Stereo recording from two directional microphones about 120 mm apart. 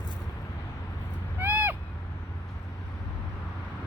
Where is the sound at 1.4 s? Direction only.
15° right (ahead or behind).